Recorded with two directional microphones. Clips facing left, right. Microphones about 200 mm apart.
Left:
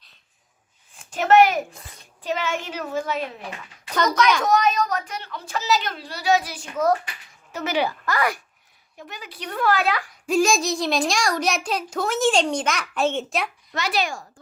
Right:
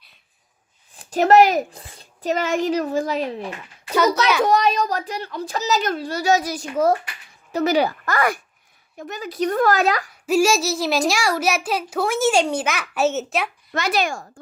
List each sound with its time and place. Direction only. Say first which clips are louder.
0.9 s a woman's voice: right 2 dB; 35° right (ahead or behind)
4.4 s a child's voice: right 2 dB; 30° right (ahead or behind)
10.2 s a child's voice: right 2 dB; 5° right (ahead or behind)
13.7 s a woman's voice: right 3 dB; 50° right (ahead or behind)